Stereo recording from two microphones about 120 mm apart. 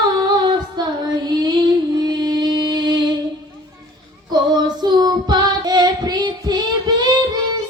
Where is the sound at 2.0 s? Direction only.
35° right (ahead or behind).